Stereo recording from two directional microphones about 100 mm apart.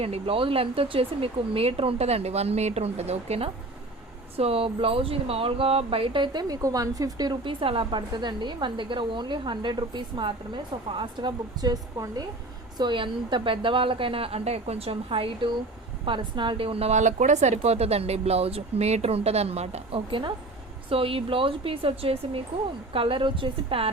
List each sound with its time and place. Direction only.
0.0 s speech: 75° right (ahead or behind)
4.4 s speech: 75° right (ahead or behind); by 7.3 s 40° right (ahead or behind)
7.4 s a woman's voice: 60° right (ahead or behind); by 12.2 s 40° right (ahead or behind)
12.7 s a woman's voice: 50° right (ahead or behind); by 16.9 s 70° right (ahead or behind)
17.6 s a woman's voice: 90° right; by 23.9 s 65° right (ahead or behind)